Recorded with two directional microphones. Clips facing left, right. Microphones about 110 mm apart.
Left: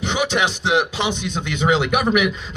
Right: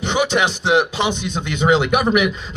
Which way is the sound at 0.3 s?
40° right (ahead or behind).